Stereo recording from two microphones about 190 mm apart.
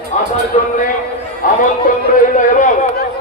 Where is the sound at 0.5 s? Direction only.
35° left (ahead or behind).